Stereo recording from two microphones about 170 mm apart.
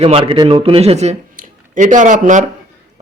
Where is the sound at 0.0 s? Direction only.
30° right (ahead or behind); by 2.4 s 50° right (ahead or behind).